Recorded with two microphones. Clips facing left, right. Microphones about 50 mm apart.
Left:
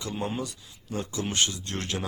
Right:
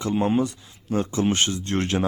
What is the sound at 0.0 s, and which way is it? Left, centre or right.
Speech, right.